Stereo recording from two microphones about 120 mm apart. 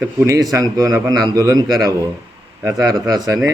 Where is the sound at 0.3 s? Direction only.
30° right (ahead or behind).